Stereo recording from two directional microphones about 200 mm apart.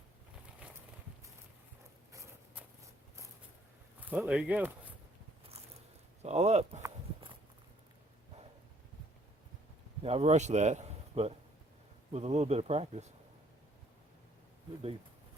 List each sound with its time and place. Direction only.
4.0 s speech: 5° right (ahead or behind)
6.2 s speech: 35° right (ahead or behind)
6.8 s walk: 25° right (ahead or behind)
10.0 s a man's voice: 30° right (ahead or behind)